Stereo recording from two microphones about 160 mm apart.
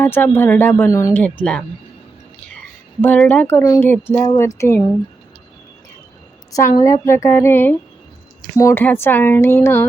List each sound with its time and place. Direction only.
0.0 s speech: 10° left (ahead or behind)
3.0 s speech: 10° left (ahead or behind)
6.7 s speech: 20° left (ahead or behind)